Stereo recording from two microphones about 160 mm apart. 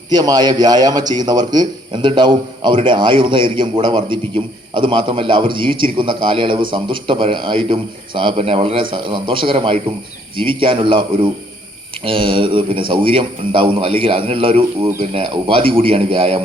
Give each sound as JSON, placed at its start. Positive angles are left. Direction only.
{"t": 0.1, "sound": "a man's voice", "side_deg": -25}